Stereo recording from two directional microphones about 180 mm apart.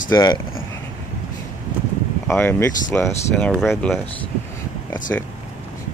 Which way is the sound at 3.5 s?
Centre (ahead or behind).